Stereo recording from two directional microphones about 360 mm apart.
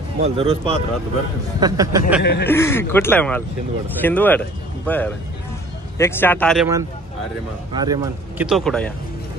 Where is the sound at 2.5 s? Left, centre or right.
Centre.